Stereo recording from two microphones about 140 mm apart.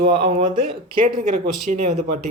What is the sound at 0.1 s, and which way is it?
Speech, 40° right (ahead or behind).